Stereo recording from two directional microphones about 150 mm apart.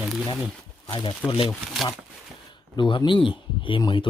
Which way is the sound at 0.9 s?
35° left (ahead or behind).